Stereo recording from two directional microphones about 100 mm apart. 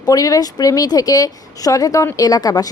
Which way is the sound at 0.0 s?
40° left (ahead or behind).